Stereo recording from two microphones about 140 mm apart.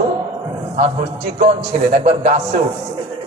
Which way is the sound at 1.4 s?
50° right (ahead or behind).